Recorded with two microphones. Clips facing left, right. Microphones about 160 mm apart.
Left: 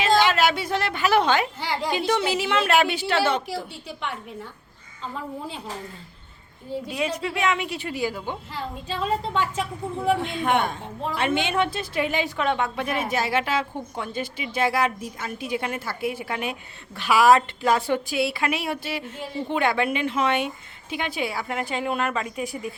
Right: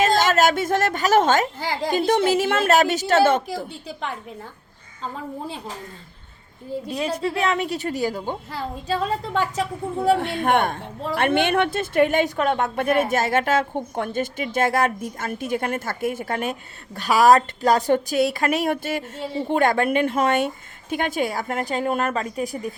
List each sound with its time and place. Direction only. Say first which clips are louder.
0.0 s a woman's voice: right 2 dB; 45° right (ahead or behind)
6.8 s speech: right 3 dB; 35° right (ahead or behind)
10.2 s a woman's voice: right 3 dB; 55° right (ahead or behind); by 22.7 s 40° right (ahead or behind)